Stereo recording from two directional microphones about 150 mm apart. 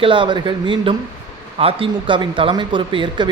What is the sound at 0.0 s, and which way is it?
Speech, 35° right (ahead or behind).